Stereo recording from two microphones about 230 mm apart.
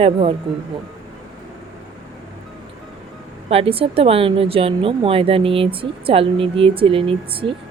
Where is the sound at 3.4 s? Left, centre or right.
Right.